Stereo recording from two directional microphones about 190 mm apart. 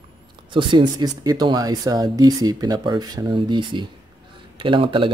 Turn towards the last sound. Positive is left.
turn(degrees=-25)  # may be behind; listen again after turning